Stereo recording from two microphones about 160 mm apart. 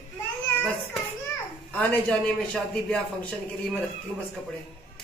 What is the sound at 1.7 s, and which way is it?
A man's voice, 10° left (ahead or behind).